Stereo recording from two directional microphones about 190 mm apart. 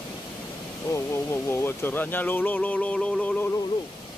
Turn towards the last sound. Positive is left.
turn(degrees=10)  # may be behind; listen again after turning